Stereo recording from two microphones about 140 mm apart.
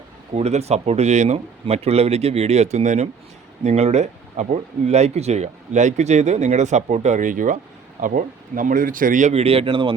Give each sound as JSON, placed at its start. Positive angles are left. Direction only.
{"t": 0.3, "sound": "speech", "side_deg": -50}